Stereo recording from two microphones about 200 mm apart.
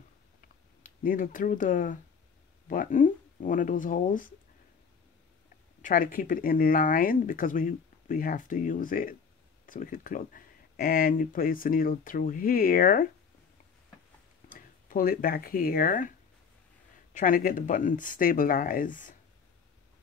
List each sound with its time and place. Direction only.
0.8 s speech: 45° left (ahead or behind)
5.8 s speech: 40° left (ahead or behind)
14.5 s speech: 45° left (ahead or behind)
17.1 s speech: 40° left (ahead or behind)